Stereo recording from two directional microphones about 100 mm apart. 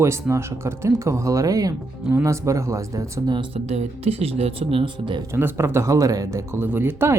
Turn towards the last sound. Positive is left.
turn(degrees=-25)  # may be behind; listen again after turning